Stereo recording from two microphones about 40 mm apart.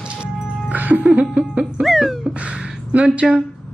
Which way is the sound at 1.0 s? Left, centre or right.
Centre.